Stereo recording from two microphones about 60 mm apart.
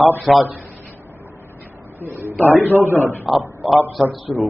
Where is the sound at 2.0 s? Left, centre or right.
Right.